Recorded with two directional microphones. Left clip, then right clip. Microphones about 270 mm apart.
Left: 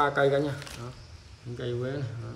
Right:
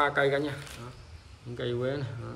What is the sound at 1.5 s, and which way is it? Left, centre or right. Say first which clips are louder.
Speech: right 2 dB; centre.